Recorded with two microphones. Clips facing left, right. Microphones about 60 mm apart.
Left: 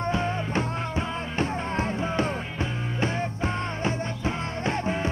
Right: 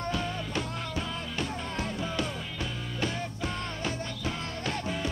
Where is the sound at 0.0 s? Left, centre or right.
Left.